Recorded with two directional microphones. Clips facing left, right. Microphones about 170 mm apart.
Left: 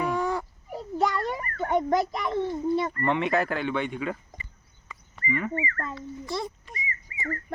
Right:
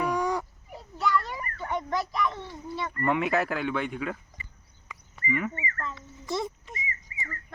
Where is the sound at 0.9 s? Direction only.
45° left (ahead or behind).